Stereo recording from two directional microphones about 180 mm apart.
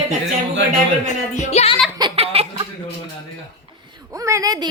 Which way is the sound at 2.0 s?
35° right (ahead or behind).